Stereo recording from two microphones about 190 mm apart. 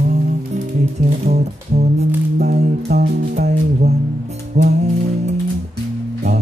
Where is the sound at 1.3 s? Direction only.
35° right (ahead or behind).